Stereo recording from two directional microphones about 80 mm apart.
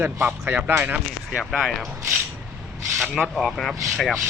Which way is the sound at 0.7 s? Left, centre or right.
Right.